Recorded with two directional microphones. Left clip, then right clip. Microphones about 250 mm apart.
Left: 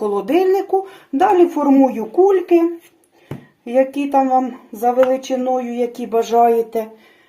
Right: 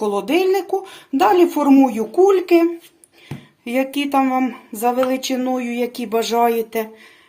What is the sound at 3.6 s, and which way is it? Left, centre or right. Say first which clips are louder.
Speech: left 4 dB; right.